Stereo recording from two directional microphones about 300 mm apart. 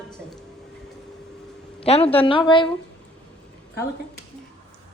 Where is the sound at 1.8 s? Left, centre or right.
Centre.